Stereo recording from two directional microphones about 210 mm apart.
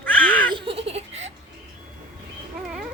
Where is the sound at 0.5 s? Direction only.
25° right (ahead or behind).